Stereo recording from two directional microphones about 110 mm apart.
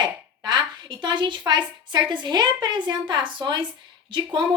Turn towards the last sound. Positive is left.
turn(degrees=-45)  # may be behind; listen again after turning